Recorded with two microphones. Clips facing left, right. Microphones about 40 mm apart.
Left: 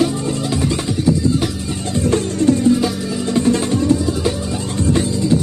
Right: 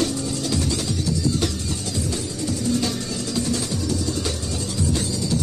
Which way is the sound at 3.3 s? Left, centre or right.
Left.